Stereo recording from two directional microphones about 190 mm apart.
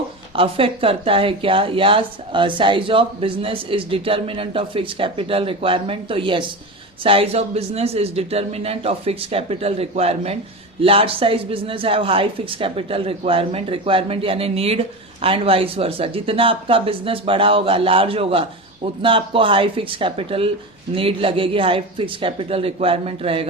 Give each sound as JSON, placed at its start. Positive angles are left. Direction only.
{"t": 0.3, "sound": "speech", "side_deg": -30}